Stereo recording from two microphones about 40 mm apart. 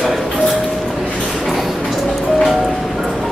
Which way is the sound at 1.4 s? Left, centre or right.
Centre.